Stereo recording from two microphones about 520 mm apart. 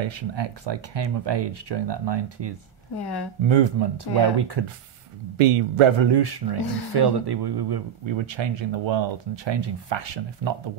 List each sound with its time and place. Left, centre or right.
0.0 s speech: right
3.0 s speech: left
3.4 s speech: right
5.4 s speech: right